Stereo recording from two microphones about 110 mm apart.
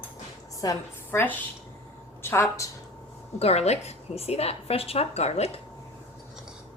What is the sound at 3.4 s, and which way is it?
A woman's voice, 70° left (ahead or behind).